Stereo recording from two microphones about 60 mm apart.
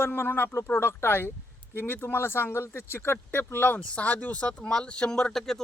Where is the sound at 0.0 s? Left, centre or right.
Left.